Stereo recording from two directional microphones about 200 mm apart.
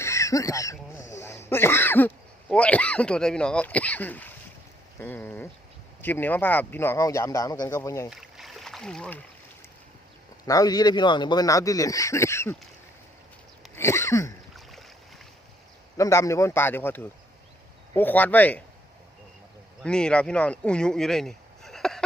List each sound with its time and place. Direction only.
0.0 s speech: 15° left (ahead or behind)
8.1 s a sound: centre (ahead or behind)
10.4 s speech: 20° left (ahead or behind)
13.7 s a sound: 15° left (ahead or behind)
14.5 s boat: centre (ahead or behind)
16.0 s speech: 15° left (ahead or behind)
19.8 s speech: 5° left (ahead or behind)